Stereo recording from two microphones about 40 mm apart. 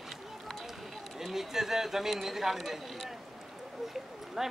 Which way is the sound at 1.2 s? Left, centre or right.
Centre.